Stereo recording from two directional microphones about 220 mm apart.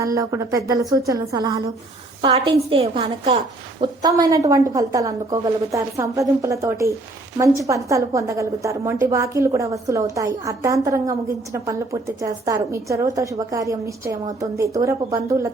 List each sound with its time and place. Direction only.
0.0 s a woman's voice: 15° right (ahead or behind)